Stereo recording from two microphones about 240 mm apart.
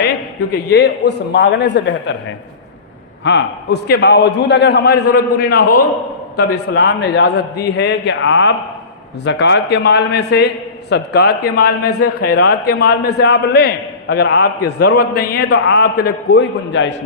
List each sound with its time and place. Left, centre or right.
0.7 s a man's voice: left
3.2 s a man's voice: left